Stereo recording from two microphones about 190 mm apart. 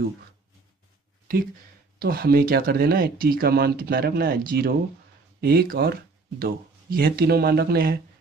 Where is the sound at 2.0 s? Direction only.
50° right (ahead or behind).